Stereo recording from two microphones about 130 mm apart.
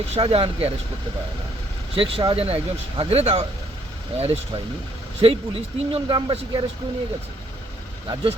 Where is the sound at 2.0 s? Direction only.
45° right (ahead or behind).